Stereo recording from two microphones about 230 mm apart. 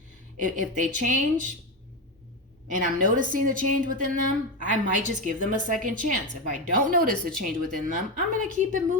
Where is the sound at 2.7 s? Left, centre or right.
Right.